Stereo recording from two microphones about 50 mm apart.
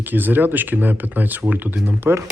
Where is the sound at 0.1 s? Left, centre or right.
Right.